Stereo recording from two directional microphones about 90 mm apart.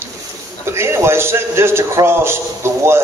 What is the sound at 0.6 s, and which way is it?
A man's voice, 30° right (ahead or behind).